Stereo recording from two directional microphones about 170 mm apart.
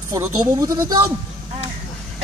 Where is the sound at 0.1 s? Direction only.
20° right (ahead or behind).